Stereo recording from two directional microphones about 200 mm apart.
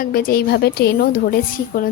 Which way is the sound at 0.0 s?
45° left (ahead or behind).